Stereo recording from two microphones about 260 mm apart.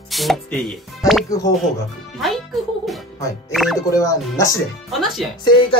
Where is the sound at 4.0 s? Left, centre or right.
Centre.